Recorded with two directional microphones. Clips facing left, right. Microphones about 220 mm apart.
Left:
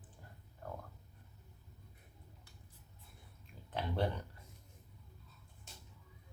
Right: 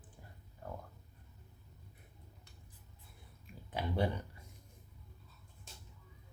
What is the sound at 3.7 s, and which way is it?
Speech, 10° right (ahead or behind).